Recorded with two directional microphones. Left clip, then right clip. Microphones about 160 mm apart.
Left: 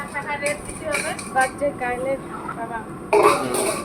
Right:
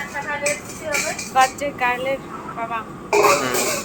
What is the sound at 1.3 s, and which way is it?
Speech, 15° left (ahead or behind).